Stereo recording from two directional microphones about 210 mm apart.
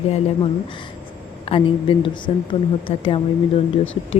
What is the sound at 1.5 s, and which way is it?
A woman's voice, 25° left (ahead or behind).